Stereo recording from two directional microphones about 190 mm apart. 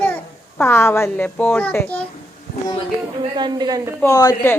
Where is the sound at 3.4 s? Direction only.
20° right (ahead or behind).